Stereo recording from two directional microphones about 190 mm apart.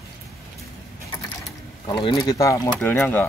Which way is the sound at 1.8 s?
25° left (ahead or behind).